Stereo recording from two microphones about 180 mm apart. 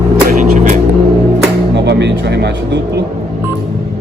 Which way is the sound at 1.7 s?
70° right (ahead or behind).